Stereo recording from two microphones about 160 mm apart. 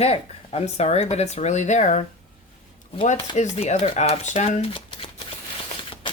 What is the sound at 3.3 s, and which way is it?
Speech, 45° left (ahead or behind).